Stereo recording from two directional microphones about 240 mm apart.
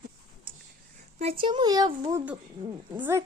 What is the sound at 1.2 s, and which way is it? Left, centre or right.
A child's voice, right.